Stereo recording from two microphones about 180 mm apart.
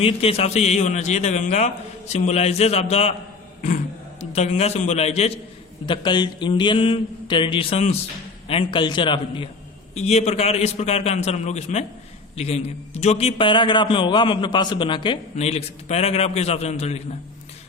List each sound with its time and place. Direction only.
0.0 s a man's voice: 35° left (ahead or behind)
4.2 s a man's voice: 35° left (ahead or behind)
5.8 s a man's voice: 25° left (ahead or behind)